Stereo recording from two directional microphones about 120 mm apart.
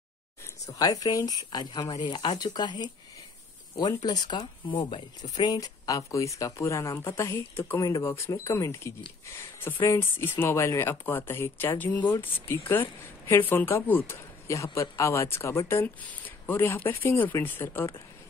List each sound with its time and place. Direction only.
0.7 s speech: 30° left (ahead or behind)
4.0 s speech: 35° left (ahead or behind)
5.3 s speech: 35° left (ahead or behind); by 17.9 s 20° left (ahead or behind)